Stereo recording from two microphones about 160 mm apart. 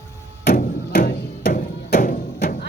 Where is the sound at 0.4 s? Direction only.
70° left (ahead or behind).